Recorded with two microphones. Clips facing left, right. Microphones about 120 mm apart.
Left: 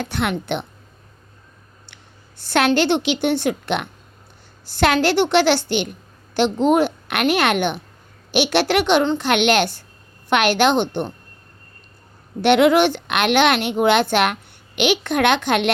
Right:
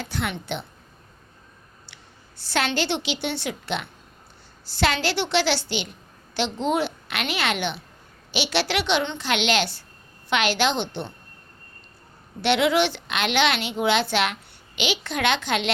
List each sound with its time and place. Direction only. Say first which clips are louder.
0.0 s a woman's voice: left 6 dB; 60° left (ahead or behind)
2.4 s a woman's voice: left 8 dB; 55° left (ahead or behind)
12.4 s a woman's voice: left 7 dB; 50° left (ahead or behind)